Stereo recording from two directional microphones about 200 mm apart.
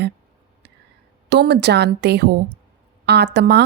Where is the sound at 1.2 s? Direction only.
55° right (ahead or behind).